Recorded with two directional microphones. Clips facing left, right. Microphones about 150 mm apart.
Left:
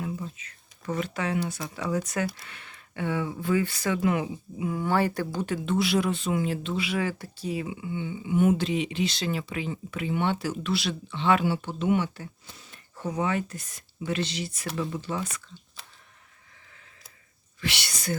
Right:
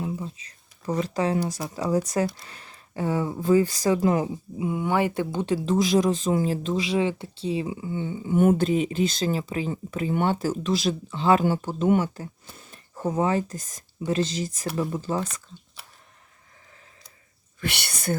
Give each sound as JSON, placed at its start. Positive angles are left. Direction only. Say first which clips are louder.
{"t": 0.0, "sound": "a sound", "louder": "right 3 dB", "side_deg": -30}
{"t": 1.7, "sound": "speech", "louder": "right 6 dB", "side_deg": -35}
{"t": 4.7, "sound": "speech", "louder": "right 1 dB", "side_deg": -15}
{"t": 17.6, "sound": "speech", "louder": "right 2 dB", "side_deg": -55}